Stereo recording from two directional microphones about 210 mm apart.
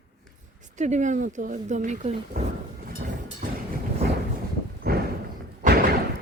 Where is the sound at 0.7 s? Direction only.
35° right (ahead or behind).